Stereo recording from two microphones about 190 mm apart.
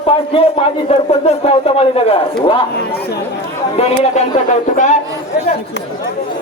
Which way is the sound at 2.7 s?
60° left (ahead or behind).